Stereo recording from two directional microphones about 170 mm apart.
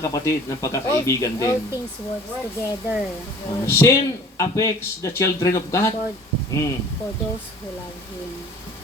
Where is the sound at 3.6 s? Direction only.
15° left (ahead or behind).